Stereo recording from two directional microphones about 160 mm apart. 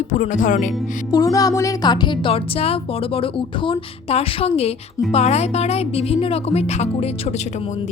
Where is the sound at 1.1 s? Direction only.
20° left (ahead or behind); by 7.8 s 45° left (ahead or behind).